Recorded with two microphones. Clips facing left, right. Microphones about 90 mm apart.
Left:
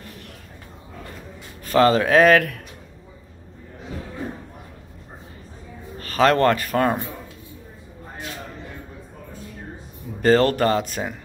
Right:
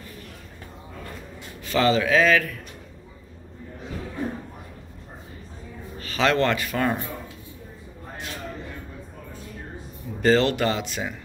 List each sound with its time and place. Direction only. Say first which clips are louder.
1.6 s speech: left 4 dB; 45° left (ahead or behind)
5.9 s speech: left 4 dB; 45° left (ahead or behind)
10.2 s speech: left 3 dB; 45° left (ahead or behind)